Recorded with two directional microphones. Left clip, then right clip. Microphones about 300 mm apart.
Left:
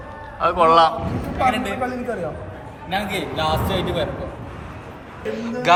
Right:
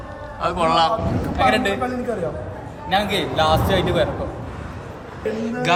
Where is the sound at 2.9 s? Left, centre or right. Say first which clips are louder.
Right 4 dB; right.